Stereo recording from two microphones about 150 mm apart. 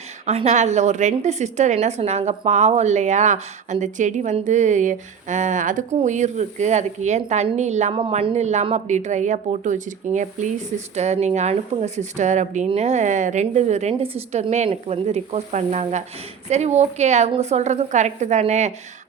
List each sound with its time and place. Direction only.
0.3 s a woman's voice: 50° right (ahead or behind)